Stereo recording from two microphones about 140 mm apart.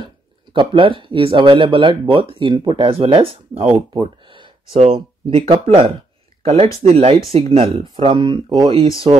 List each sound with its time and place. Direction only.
0.0 s speech: 40° right (ahead or behind)
4.7 s speech: 45° right (ahead or behind)